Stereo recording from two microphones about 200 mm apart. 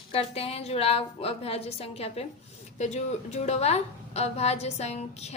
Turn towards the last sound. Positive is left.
turn(degrees=35)  # may be behind; listen again after turning